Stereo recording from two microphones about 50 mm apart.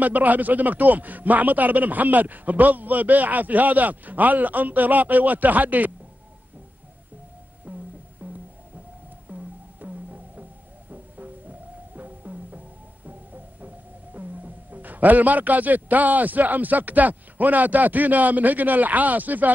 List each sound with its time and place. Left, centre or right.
0.0 s a man's voice: right
7.7 s music: right